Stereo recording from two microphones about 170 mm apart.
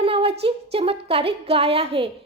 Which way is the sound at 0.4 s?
35° right (ahead or behind).